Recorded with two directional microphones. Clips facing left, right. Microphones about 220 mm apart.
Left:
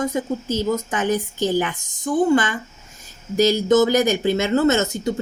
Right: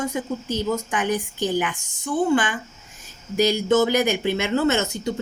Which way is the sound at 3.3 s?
40° left (ahead or behind).